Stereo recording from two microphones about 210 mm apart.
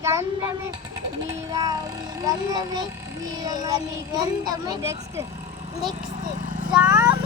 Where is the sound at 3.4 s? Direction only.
20° right (ahead or behind).